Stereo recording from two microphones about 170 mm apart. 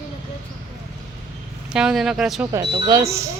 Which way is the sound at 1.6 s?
5° right (ahead or behind).